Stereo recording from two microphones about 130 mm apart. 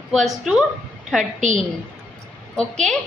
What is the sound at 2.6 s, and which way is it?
Speech, 5° left (ahead or behind).